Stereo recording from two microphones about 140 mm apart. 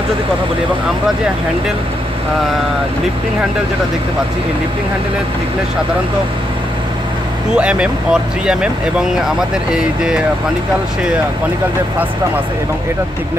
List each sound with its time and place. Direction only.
7.5 s speech: 5° right (ahead or behind)